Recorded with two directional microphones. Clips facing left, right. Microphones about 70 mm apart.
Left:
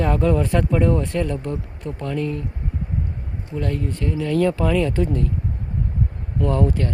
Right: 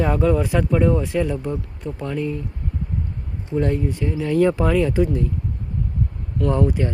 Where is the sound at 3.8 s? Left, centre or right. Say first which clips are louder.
Right 1 dB; centre.